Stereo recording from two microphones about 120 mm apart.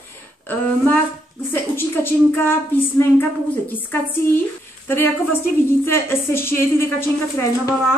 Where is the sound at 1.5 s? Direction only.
20° left (ahead or behind).